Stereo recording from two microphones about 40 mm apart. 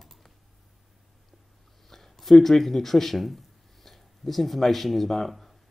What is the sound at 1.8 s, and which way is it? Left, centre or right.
Speech, centre.